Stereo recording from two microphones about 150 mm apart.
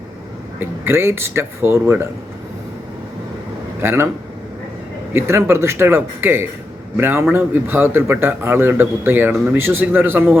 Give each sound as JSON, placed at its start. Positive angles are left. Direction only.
{"t": 0.6, "sound": "a man's voice", "side_deg": -15}
{"t": 3.8, "sound": "a man's voice", "side_deg": -15}
{"t": 5.1, "sound": "a man's voice", "side_deg": -15}